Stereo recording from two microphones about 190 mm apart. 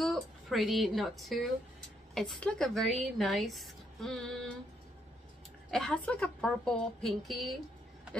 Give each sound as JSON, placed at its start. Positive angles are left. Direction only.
{"t": 0.0, "sound": "a woman's voice", "side_deg": 0}
{"t": 5.7, "sound": "speech", "side_deg": 0}